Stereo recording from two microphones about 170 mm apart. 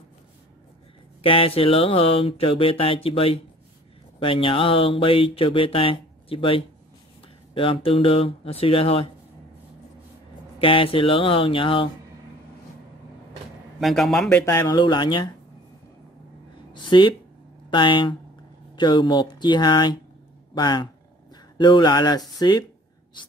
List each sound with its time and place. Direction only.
1.2 s speech: 30° left (ahead or behind)
10.6 s speech: 30° left (ahead or behind)
13.7 s a man's voice: centre (ahead or behind)
14.4 s speech: 20° left (ahead or behind)
16.7 s speech: 25° left (ahead or behind)